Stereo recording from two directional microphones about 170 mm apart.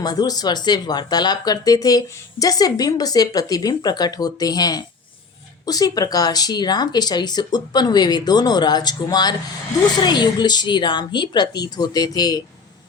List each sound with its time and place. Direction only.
0.0 s speech: 25° left (ahead or behind)